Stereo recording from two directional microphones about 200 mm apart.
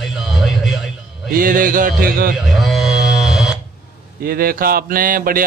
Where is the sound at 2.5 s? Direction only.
Centre (ahead or behind).